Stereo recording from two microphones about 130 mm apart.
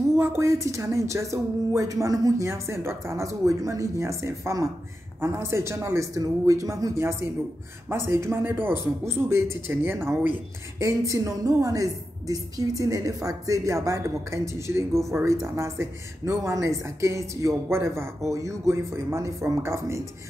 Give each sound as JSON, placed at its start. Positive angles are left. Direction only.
{"t": 0.2, "sound": "speech", "side_deg": -25}